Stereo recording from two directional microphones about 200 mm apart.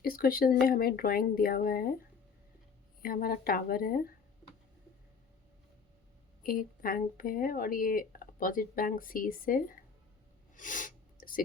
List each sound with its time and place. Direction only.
0.0 s speech: 45° left (ahead or behind)
3.0 s speech: 45° left (ahead or behind)
6.4 s speech: 45° left (ahead or behind)
10.5 s sneeze: 40° left (ahead or behind)